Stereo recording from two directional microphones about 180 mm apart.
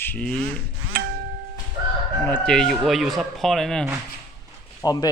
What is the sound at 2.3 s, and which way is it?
Speech, 5° left (ahead or behind).